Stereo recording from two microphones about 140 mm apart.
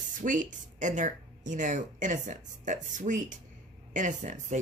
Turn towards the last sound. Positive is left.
turn(degrees=-60)  # may be behind; listen again after turning